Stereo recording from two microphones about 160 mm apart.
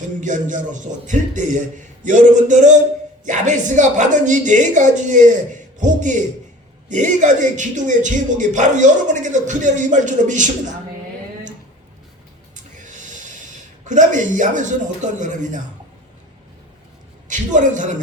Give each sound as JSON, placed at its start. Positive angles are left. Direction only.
{"t": 0.2, "sound": "a man's voice", "side_deg": -50}
{"t": 12.5, "sound": "a sound", "side_deg": -50}
{"t": 17.2, "sound": "a man's voice", "side_deg": -50}